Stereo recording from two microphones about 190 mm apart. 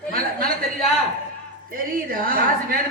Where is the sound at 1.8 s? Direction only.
50° right (ahead or behind).